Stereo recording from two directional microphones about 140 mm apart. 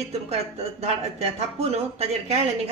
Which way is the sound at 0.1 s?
45° right (ahead or behind).